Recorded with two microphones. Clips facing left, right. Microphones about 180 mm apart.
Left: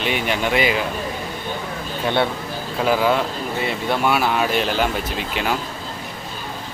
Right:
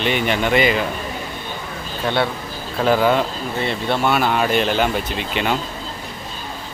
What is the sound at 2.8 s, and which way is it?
Speech, 5° left (ahead or behind).